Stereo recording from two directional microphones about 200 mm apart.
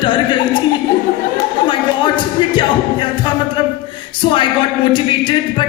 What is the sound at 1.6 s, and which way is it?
Speech, 25° left (ahead or behind).